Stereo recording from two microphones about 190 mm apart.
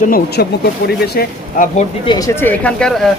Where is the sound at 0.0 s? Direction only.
50° left (ahead or behind).